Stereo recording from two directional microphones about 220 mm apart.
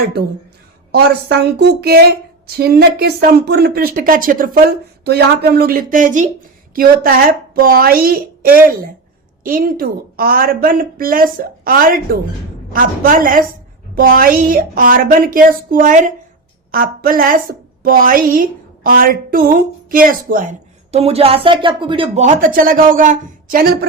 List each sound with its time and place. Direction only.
0.9 s a woman's voice: 45° right (ahead or behind)